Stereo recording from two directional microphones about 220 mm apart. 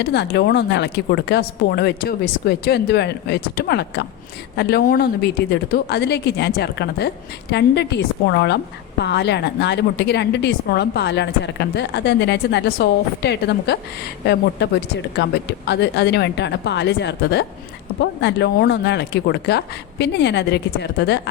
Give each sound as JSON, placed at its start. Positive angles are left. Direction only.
{"t": 0.0, "sound": "a woman's voice", "side_deg": 50}